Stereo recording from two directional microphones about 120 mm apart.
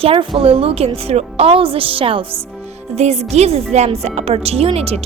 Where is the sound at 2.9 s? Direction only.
65° right (ahead or behind).